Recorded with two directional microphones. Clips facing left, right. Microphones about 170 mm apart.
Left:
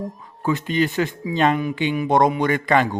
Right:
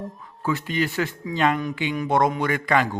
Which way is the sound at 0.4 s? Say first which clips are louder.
Left 4 dB; 20° left (ahead or behind).